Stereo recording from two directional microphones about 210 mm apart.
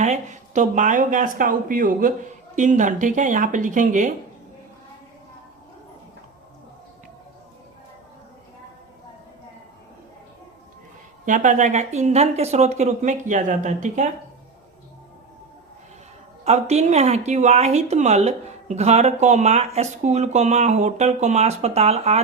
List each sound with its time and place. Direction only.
0.0 s speech: 35° right (ahead or behind)
11.3 s speech: 40° right (ahead or behind)
16.4 s speech: 30° right (ahead or behind)